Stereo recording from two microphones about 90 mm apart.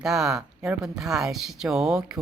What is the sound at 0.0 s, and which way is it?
Speech, 5° right (ahead or behind).